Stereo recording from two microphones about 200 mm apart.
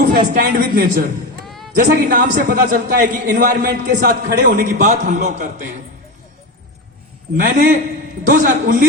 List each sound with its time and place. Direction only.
0.1 s a man's voice: 45° right (ahead or behind)
1.5 s a sound: centre (ahead or behind)
1.9 s a man's voice: 45° right (ahead or behind)
7.3 s a man's voice: 45° right (ahead or behind)